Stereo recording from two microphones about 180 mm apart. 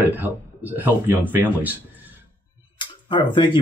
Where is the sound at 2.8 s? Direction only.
25° left (ahead or behind).